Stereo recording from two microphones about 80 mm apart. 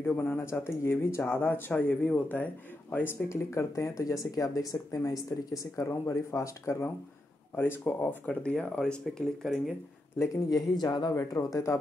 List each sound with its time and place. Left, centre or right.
0.0 s speech: left
5.9 s speech: left
7.5 s speech: left
10.1 s speech: left
10.7 s speech: left